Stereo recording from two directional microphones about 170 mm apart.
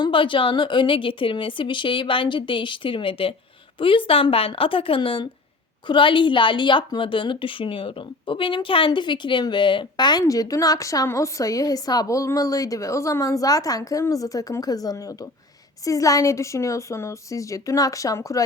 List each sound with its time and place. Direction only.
0.0 s a woman's voice: 30° left (ahead or behind)